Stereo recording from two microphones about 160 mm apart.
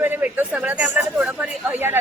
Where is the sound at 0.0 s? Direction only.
15° right (ahead or behind).